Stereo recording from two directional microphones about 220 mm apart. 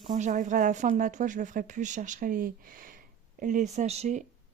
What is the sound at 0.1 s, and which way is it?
Speech, 35° right (ahead or behind).